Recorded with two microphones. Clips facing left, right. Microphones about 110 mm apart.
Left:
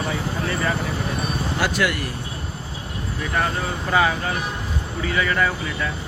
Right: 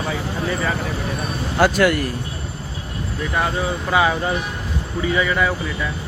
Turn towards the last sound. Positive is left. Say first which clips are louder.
# right 2 dB
turn(degrees=-5)  # may be behind; listen again after turning